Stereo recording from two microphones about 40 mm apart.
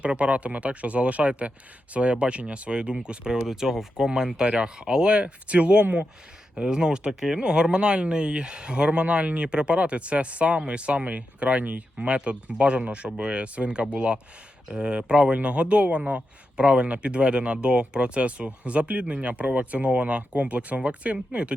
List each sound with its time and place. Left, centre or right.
0.0 s a man's voice: right
3.3 s speech: centre; by 6.1 s right
6.6 s a man's voice: centre; by 11.8 s right
11.9 s a man's voice: right